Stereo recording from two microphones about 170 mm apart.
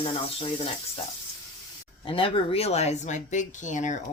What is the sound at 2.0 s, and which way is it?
Speech, 30° left (ahead or behind).